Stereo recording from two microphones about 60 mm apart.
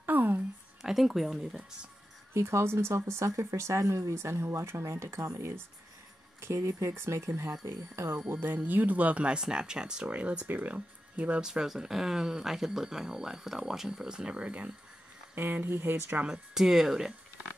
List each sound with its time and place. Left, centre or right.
0.0 s a sound: right
0.8 s speech: centre
2.3 s speech: right
8.3 s speech: right
11.4 s speech: centre
15.3 s speech: right
16.3 s speech: centre